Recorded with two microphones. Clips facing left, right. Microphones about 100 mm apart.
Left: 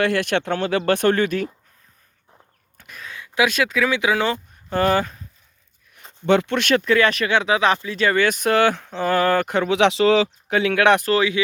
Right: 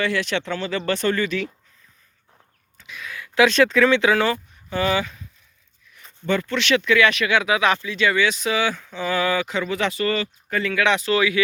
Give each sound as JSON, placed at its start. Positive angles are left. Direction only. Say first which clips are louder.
{"t": 0.0, "sound": "speech", "louder": "left 3 dB", "side_deg": 55}
{"t": 2.7, "sound": "a sound", "louder": "right 2 dB", "side_deg": 50}
{"t": 3.0, "sound": "a sound", "louder": "right 1 dB", "side_deg": 25}
{"t": 3.3, "sound": "speech", "louder": "right 4 dB", "side_deg": 10}
{"t": 4.7, "sound": "speech", "louder": "left 3 dB", "side_deg": 45}
{"t": 6.2, "sound": "speech", "louder": "left 5 dB", "side_deg": 70}
{"t": 6.6, "sound": "speech", "louder": "left 1 dB", "side_deg": 45}
{"t": 9.0, "sound": "speech", "louder": "left 3 dB", "side_deg": 50}
{"t": 11.1, "sound": "speech", "louder": "left 1 dB", "side_deg": 30}